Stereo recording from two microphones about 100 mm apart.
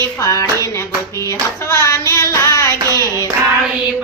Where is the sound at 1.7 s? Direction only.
25° left (ahead or behind).